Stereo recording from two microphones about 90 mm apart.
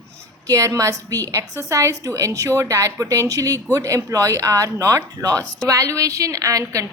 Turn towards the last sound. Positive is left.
turn(degrees=-40)  # may be behind; listen again after turning